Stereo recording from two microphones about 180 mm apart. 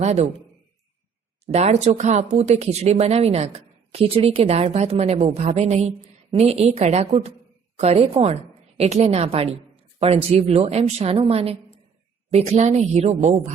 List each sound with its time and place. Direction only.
0.0 s speech: 40° right (ahead or behind)
1.5 s a woman's voice: 35° right (ahead or behind)